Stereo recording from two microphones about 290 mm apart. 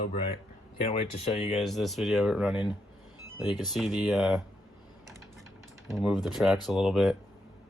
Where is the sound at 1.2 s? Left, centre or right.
Left.